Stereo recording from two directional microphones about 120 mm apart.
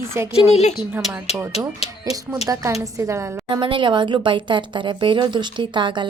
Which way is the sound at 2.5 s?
25° right (ahead or behind).